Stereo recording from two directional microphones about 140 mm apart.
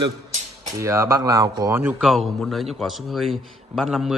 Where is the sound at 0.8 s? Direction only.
20° right (ahead or behind).